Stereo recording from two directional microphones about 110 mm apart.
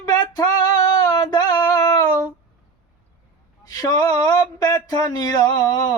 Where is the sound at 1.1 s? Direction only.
40° left (ahead or behind).